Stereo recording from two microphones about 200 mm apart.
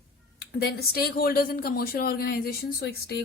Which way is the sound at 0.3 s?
50° left (ahead or behind).